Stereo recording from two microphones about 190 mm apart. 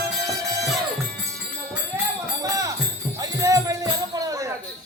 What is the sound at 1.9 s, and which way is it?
Music, 15° right (ahead or behind).